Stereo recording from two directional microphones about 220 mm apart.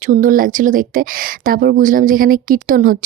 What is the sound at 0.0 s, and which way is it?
Speech, 40° right (ahead or behind).